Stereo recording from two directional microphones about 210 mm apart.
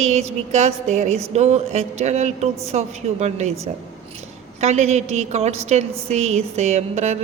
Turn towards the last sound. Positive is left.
turn(degrees=-35)  # may be behind; listen again after turning